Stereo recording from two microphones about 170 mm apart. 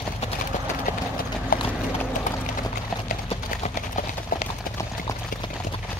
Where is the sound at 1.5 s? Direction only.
55° left (ahead or behind).